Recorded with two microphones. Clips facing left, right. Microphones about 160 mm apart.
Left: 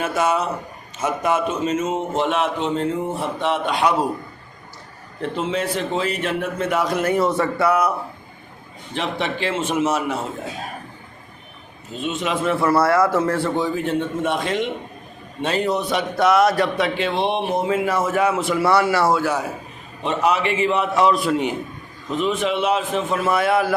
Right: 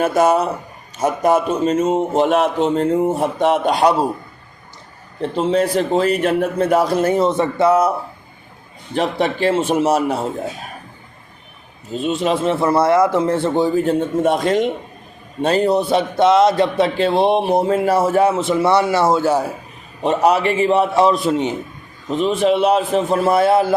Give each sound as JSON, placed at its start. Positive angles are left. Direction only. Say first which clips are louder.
{"t": 0.0, "sound": "a man's voice", "louder": "right 6 dB", "side_deg": -40}
{"t": 5.2, "sound": "a man's voice", "louder": "right 6 dB", "side_deg": -35}
{"t": 9.0, "sound": "a man's voice", "louder": "right 6 dB", "side_deg": -40}
{"t": 11.9, "sound": "a man's voice", "louder": "right 5 dB", "side_deg": -35}
{"t": 20.0, "sound": "a man's voice", "louder": "right 5 dB", "side_deg": -40}
{"t": 22.2, "sound": "a man's voice", "louder": "right 6 dB", "side_deg": -35}